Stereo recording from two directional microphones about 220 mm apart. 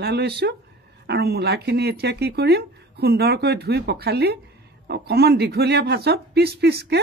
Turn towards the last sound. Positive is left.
turn(degrees=-45)  # may be behind; listen again after turning